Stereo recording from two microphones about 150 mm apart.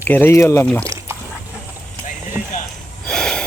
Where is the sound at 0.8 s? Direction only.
15° right (ahead or behind).